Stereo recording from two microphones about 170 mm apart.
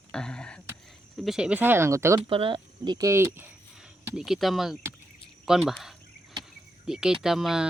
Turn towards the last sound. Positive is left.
turn(degrees=0)  # may be behind; listen again after turning